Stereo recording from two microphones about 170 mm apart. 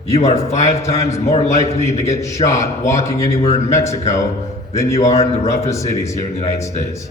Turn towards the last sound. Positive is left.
turn(degrees=40)  # may be behind; listen again after turning